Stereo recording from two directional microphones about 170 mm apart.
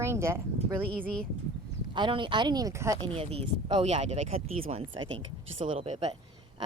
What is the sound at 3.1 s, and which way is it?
Speech, 35° right (ahead or behind).